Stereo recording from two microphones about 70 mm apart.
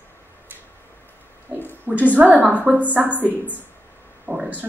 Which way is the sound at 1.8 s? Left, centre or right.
Right.